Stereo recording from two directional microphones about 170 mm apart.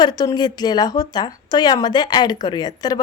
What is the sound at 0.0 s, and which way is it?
A woman's voice, 25° left (ahead or behind).